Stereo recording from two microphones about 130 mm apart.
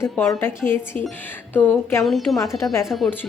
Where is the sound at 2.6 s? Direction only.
25° left (ahead or behind).